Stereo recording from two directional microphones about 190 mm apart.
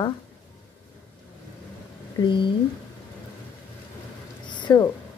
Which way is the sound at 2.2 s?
25° left (ahead or behind).